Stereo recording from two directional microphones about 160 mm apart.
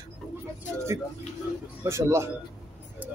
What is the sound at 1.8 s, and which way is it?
Speech, 15° right (ahead or behind).